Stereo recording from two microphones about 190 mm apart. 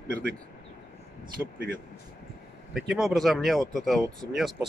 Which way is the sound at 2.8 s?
Centre (ahead or behind).